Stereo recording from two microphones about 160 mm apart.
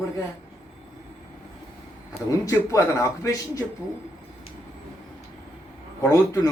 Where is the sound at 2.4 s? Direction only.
20° left (ahead or behind).